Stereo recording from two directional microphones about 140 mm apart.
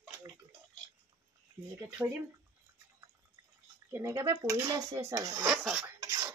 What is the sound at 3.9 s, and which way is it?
Speech, 20° right (ahead or behind).